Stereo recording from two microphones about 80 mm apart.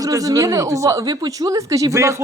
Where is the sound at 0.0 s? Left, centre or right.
Right.